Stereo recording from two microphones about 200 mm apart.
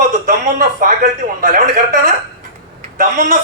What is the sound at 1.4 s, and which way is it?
Speech, 45° right (ahead or behind).